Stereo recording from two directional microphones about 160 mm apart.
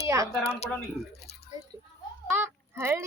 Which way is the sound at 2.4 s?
15° right (ahead or behind).